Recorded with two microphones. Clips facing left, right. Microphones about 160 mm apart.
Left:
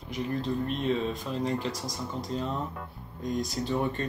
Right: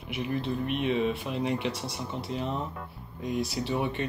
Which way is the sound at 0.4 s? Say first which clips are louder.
Even; 70° right (ahead or behind).